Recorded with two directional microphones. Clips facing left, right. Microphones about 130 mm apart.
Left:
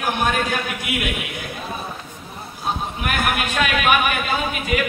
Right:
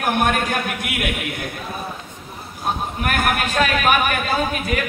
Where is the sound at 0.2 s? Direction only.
55° right (ahead or behind).